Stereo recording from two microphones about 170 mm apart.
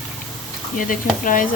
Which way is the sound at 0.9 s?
50° left (ahead or behind).